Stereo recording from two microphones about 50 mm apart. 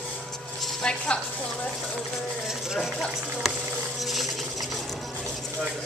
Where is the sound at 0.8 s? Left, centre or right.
Left.